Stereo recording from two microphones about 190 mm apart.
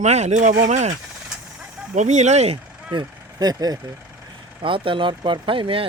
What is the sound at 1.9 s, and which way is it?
Speech, 40° right (ahead or behind).